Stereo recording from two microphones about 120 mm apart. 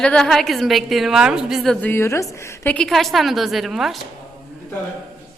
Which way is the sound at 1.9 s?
20° left (ahead or behind).